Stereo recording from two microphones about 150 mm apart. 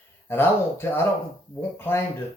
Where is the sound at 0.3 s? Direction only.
15° left (ahead or behind).